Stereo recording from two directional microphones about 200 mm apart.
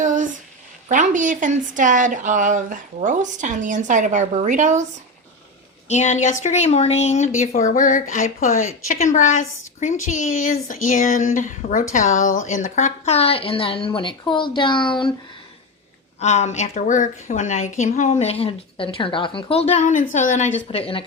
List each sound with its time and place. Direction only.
0.0 s a sound: 40° right (ahead or behind)
0.9 s speech: 40° right (ahead or behind)
5.9 s speech: 35° left (ahead or behind)
16.2 s speech: 35° left (ahead or behind)